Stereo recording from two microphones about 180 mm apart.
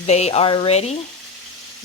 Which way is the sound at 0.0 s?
35° left (ahead or behind).